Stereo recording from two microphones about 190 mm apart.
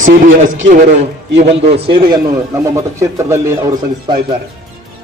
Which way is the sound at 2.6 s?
15° right (ahead or behind).